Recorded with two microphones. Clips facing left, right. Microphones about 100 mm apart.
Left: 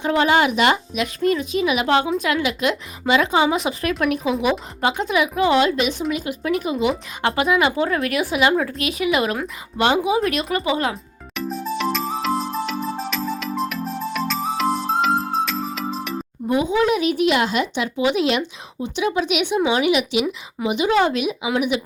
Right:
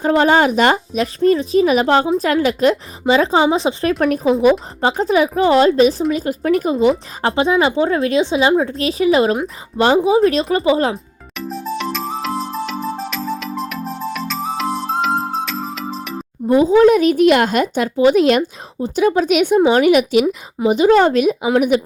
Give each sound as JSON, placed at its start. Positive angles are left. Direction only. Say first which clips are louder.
{"t": 0.0, "sound": "speech", "louder": "right 4 dB", "side_deg": -35}
{"t": 11.3, "sound": "music", "louder": "right 1 dB", "side_deg": 0}
{"t": 16.5, "sound": "speech", "louder": "right 8 dB", "side_deg": -35}